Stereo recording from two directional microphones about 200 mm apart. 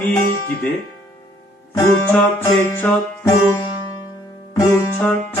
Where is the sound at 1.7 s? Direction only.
15° left (ahead or behind).